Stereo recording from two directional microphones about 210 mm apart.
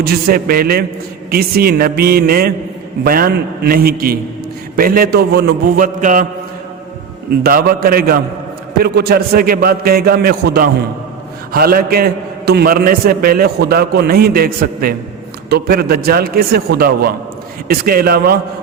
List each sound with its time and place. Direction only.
0.0 s a man's voice: 45° right (ahead or behind)
7.3 s a man's voice: 45° right (ahead or behind)